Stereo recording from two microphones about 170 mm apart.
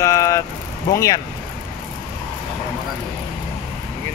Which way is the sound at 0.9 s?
20° left (ahead or behind).